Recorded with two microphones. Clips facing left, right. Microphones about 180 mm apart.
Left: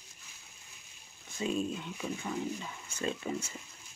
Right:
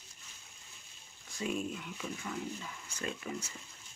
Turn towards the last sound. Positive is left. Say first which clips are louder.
# left 5 dB
turn(degrees=25)  # may be behind; listen again after turning